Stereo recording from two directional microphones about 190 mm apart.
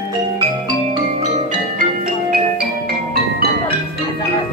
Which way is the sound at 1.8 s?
55° right (ahead or behind).